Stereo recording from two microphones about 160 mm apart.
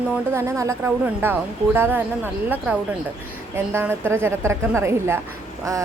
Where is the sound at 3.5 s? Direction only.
15° right (ahead or behind).